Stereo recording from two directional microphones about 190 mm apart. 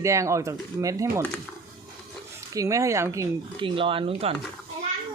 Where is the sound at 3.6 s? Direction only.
25° right (ahead or behind).